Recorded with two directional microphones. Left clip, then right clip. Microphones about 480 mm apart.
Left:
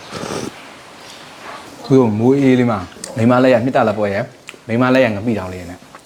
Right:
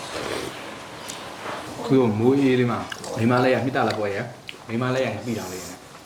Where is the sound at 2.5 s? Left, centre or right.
Left.